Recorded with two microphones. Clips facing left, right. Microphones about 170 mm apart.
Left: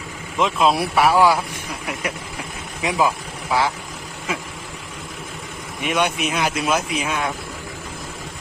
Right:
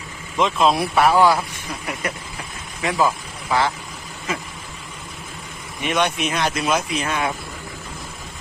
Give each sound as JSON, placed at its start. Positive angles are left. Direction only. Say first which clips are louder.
{"t": 0.3, "sound": "speech", "louder": "even", "side_deg": 5}
{"t": 3.5, "sound": "speech", "louder": "even", "side_deg": 10}
{"t": 5.8, "sound": "speech", "louder": "even", "side_deg": 5}